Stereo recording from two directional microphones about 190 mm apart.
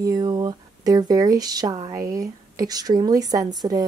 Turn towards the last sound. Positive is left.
turn(degrees=-20)  # may be behind; listen again after turning